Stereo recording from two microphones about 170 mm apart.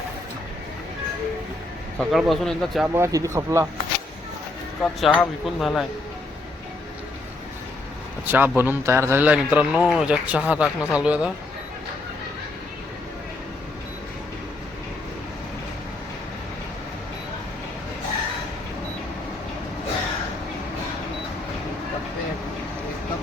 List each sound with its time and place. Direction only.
2.0 s speech: centre (ahead or behind)
2.8 s a man's voice: 15° right (ahead or behind)
4.8 s speech: centre (ahead or behind)
8.3 s a man's voice: 10° right (ahead or behind)